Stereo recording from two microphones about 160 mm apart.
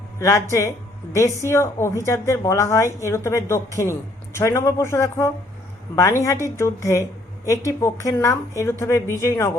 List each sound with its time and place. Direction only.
0.2 s a woman's voice: 20° left (ahead or behind)